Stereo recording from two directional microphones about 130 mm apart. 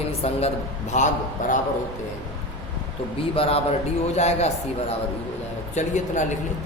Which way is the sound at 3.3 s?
45° left (ahead or behind).